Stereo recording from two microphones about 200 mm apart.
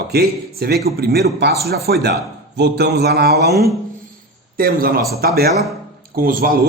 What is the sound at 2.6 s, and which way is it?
Mantra, 55° right (ahead or behind).